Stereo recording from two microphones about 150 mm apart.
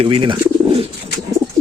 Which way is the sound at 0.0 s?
35° right (ahead or behind).